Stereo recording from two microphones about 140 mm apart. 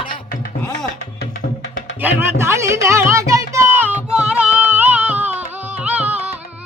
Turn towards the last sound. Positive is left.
turn(degrees=-10)  # may be behind; listen again after turning